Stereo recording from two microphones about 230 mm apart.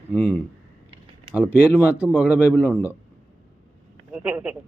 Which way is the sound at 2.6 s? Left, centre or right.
Centre.